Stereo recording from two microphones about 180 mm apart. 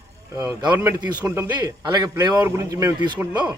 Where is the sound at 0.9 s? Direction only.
25° right (ahead or behind).